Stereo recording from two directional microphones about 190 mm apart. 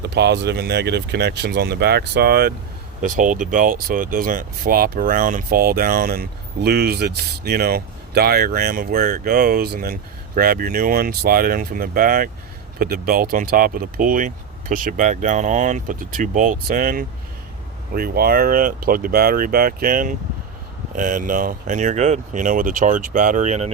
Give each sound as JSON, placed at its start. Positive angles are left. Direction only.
{"t": 0.0, "sound": "speech", "side_deg": -60}
{"t": 3.0, "sound": "speech", "side_deg": -45}